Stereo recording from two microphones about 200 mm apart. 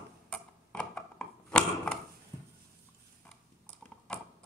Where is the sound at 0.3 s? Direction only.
5° left (ahead or behind).